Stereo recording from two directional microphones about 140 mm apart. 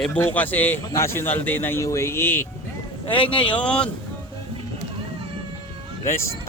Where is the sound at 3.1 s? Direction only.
40° left (ahead or behind).